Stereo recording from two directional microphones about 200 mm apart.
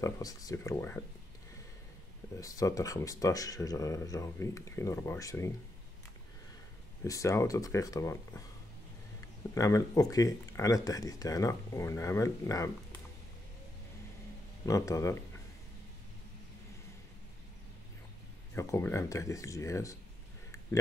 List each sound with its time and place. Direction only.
0.0 s speech: 15° left (ahead or behind)
2.3 s speech: 15° left (ahead or behind)
7.1 s speech: 15° left (ahead or behind)
9.5 s speech: 15° left (ahead or behind)
14.7 s speech: 15° left (ahead or behind)
18.5 s speech: 15° left (ahead or behind)